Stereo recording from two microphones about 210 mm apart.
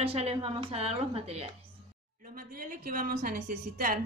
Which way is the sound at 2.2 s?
45° right (ahead or behind).